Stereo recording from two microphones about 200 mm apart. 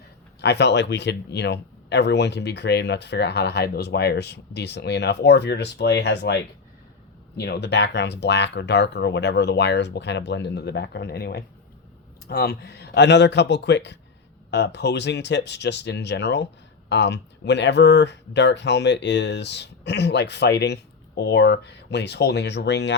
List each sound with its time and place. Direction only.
0.4 s speech: 60° left (ahead or behind)